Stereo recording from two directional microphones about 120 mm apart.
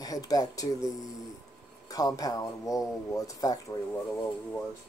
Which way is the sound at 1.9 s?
30° left (ahead or behind).